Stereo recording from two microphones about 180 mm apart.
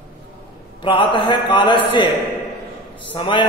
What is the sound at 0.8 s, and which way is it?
Speech, 25° left (ahead or behind).